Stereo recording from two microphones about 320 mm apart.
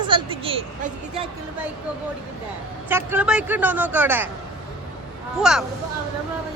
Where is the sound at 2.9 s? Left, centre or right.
Centre.